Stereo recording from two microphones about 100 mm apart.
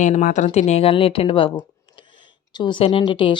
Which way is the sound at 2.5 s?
50° left (ahead or behind).